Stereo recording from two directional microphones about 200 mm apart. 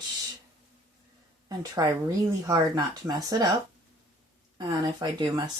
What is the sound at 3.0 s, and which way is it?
Speech, 20° right (ahead or behind).